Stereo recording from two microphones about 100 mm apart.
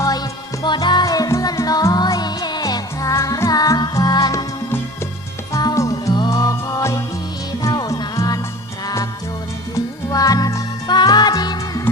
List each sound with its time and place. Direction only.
0.6 s music: 45° left (ahead or behind)
5.5 s music: 35° left (ahead or behind)
9.7 s music: 40° left (ahead or behind)